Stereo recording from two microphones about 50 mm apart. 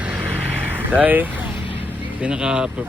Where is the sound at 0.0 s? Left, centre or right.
Right.